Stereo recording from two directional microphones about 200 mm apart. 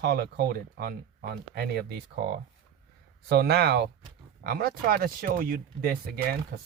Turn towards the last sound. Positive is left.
turn(degrees=-45)  # may be behind; listen again after turning